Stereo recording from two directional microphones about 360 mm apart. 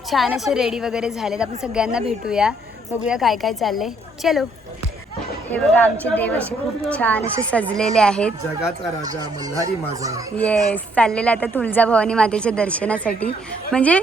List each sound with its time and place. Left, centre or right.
0.1 s speech: centre
5.5 s speech: centre
9.0 s speech: centre
10.3 s speech: centre